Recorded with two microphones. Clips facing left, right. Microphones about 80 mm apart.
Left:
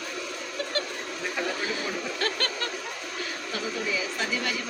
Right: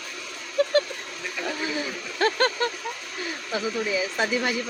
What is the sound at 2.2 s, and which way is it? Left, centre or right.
Speech, right.